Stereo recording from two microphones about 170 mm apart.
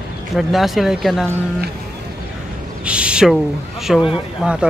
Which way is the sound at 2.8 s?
5° right (ahead or behind).